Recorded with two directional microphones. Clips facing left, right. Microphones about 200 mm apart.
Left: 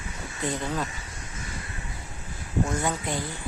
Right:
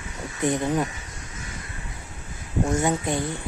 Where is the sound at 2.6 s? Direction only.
25° right (ahead or behind).